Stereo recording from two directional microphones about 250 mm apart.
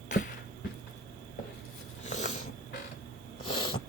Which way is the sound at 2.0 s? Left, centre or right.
Left.